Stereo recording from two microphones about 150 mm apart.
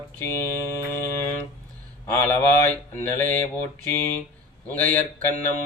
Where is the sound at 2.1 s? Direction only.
15° left (ahead or behind).